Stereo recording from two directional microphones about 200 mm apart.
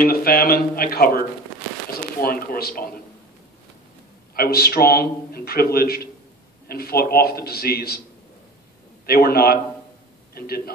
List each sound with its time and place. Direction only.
0.0 s a man's voice: 45° left (ahead or behind)
4.4 s a man's voice: 50° left (ahead or behind)
9.0 s a man's voice: 50° left (ahead or behind)